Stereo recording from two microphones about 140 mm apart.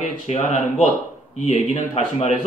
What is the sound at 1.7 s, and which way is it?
Speech, 55° left (ahead or behind).